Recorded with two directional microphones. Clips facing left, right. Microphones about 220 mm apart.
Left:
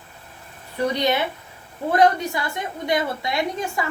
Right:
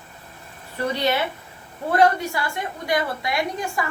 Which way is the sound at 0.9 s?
15° left (ahead or behind).